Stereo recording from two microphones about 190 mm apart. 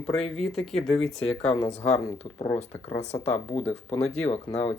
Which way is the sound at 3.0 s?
35° left (ahead or behind).